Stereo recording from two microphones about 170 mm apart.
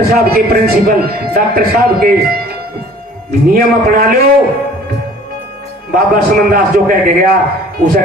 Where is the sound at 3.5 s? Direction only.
60° right (ahead or behind).